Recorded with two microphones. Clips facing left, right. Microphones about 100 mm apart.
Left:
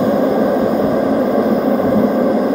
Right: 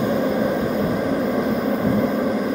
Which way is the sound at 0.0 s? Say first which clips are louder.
Left 7 dB; 30° left (ahead or behind).